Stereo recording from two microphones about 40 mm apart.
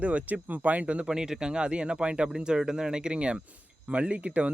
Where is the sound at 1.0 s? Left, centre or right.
Centre.